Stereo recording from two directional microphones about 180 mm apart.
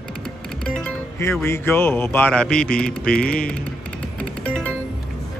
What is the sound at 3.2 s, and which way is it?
Speech, 5° left (ahead or behind).